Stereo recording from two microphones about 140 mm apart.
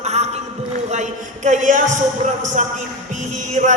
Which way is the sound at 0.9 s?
60° right (ahead or behind).